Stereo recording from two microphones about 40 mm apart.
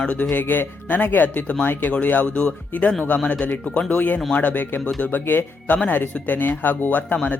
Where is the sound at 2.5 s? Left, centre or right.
Left.